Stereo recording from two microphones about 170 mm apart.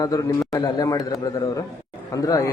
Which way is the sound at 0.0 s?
20° left (ahead or behind).